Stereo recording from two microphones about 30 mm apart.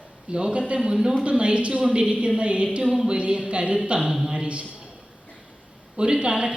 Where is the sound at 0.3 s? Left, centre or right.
Right.